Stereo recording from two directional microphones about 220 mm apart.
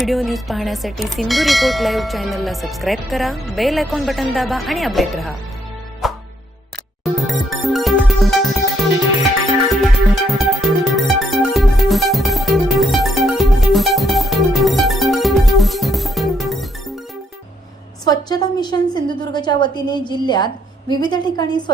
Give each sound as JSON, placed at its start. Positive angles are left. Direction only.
{"t": 0.0, "sound": "bell", "side_deg": 0}
{"t": 6.0, "sound": "music", "side_deg": 0}
{"t": 9.6, "sound": "music", "side_deg": 0}
{"t": 18.0, "sound": "a woman's voice", "side_deg": 15}